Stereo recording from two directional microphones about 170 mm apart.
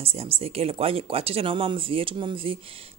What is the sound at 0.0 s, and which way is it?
Speech, 35° right (ahead or behind).